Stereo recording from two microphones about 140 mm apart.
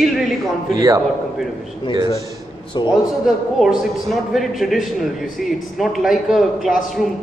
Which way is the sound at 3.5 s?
Centre (ahead or behind).